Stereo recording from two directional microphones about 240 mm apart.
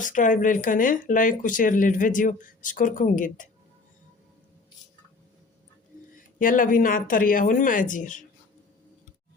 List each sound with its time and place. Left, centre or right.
0.0 s speech: left
6.1 s speech: left